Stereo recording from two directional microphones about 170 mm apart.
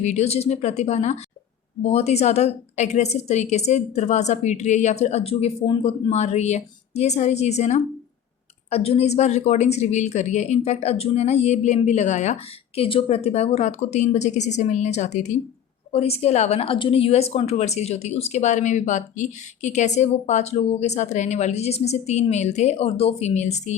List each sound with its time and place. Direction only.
0.0 s a woman's voice: 40° left (ahead or behind)